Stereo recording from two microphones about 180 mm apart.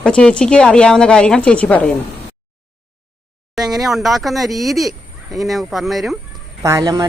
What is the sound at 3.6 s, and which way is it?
A woman's voice, centre (ahead or behind).